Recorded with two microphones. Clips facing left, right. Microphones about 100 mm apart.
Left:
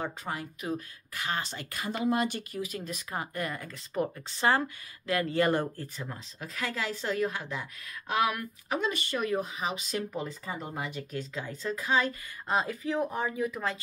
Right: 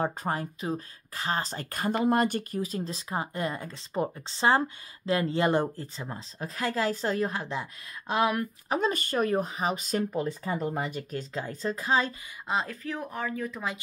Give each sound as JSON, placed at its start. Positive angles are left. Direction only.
{"t": 0.0, "sound": "speech", "side_deg": -40}
{"t": 12.4, "sound": "speech", "side_deg": 0}
{"t": 12.8, "sound": "speech", "side_deg": 20}